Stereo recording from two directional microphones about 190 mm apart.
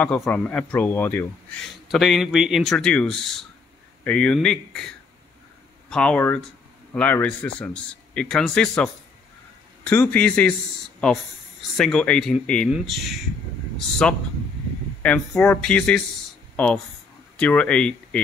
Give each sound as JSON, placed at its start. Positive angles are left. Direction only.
{"t": 0.0, "sound": "a man's voice", "side_deg": 5}
{"t": 11.7, "sound": "a man's voice", "side_deg": 5}